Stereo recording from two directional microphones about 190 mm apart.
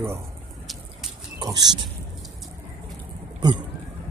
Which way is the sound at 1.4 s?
25° right (ahead or behind).